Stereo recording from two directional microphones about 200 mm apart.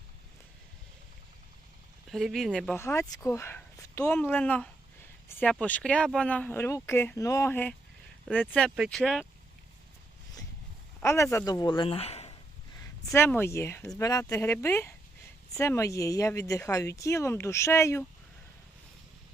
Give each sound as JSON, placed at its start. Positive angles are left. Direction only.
{"t": 2.0, "sound": "speech", "side_deg": 0}
{"t": 2.7, "sound": "speech", "side_deg": 15}
{"t": 11.0, "sound": "speech", "side_deg": 15}
{"t": 13.1, "sound": "speech", "side_deg": 10}